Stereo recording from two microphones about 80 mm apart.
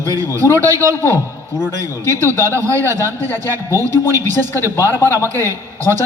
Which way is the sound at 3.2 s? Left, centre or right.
Left.